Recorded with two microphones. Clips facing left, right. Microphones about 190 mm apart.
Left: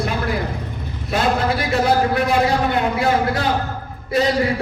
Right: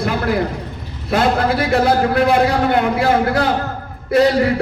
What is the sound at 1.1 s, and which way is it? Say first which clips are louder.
A man's voice: right 3 dB; 60° right (ahead or behind).